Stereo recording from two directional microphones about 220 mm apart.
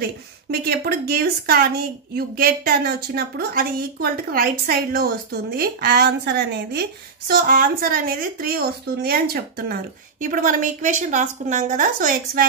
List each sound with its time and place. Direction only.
0.5 s a woman's voice: 45° right (ahead or behind)